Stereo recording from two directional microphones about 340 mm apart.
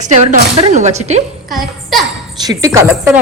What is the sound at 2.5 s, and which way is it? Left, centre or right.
Speech, centre.